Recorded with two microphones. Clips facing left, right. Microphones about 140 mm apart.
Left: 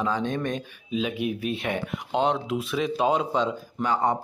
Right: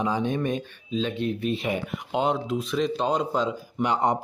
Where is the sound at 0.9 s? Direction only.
10° left (ahead or behind).